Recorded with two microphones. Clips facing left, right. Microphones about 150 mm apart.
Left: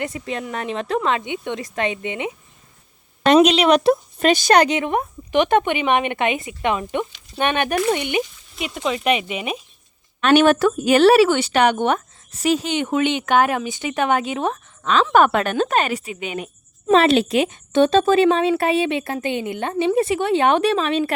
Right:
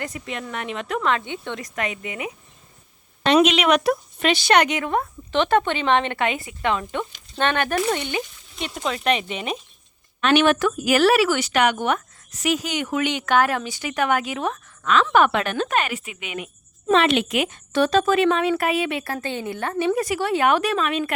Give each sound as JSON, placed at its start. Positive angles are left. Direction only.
{"t": 0.0, "sound": "speech", "side_deg": 30}
{"t": 3.4, "sound": "speech", "side_deg": 35}
{"t": 4.3, "sound": "speech", "side_deg": 45}
{"t": 4.9, "sound": "a woman's voice", "side_deg": 15}
{"t": 8.5, "sound": "a woman's voice", "side_deg": 5}
{"t": 10.2, "sound": "speech", "side_deg": 40}
{"t": 15.1, "sound": "speech", "side_deg": 45}